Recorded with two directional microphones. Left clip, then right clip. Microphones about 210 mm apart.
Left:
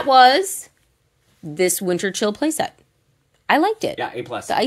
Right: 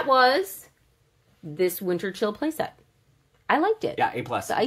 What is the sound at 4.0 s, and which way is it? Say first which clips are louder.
Speech: right 1 dB; 30° right (ahead or behind).